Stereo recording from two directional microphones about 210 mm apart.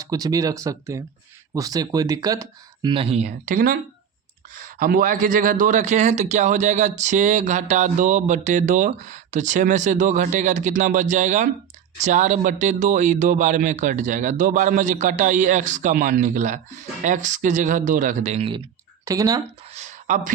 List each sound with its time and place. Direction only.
0.0 s a man's voice: 15° right (ahead or behind)
19.0 s speech: 15° right (ahead or behind)
19.7 s a sound: 35° right (ahead or behind)